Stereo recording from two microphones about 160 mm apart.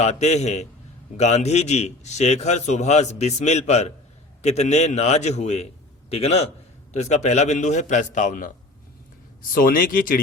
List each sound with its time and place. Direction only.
0.0 s a man's voice: 45° left (ahead or behind)
9.5 s speech: 60° left (ahead or behind)